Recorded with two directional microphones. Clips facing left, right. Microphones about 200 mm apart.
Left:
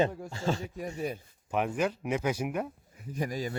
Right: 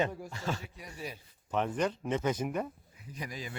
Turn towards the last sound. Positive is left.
turn(degrees=45)  # may be behind; listen again after turning